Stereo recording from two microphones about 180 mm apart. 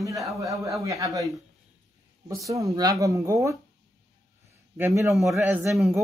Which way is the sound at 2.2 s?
20° right (ahead or behind).